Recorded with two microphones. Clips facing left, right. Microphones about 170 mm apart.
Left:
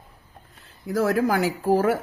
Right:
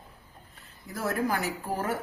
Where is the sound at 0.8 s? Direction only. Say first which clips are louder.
Left 8 dB; 90° left.